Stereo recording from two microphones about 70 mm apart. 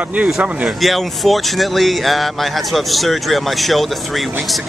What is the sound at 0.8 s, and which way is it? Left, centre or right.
Speech, centre.